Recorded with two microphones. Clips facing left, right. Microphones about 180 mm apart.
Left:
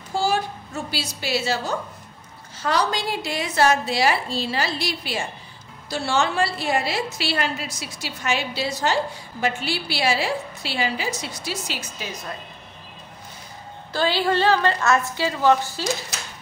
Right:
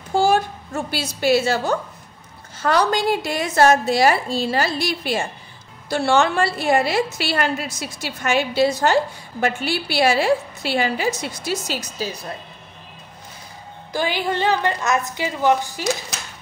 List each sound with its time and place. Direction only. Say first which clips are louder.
0.1 s a sound: right 6 dB; 55° right (ahead or behind)
0.9 s a woman's voice: right 9 dB; 50° right (ahead or behind)
2.6 s a woman's voice: right 5 dB; 50° right (ahead or behind); by 12.2 s 35° right (ahead or behind)
13.9 s a woman's voice: left 1 dB; 15° right (ahead or behind)